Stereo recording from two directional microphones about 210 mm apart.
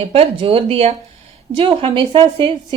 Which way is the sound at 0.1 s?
25° right (ahead or behind).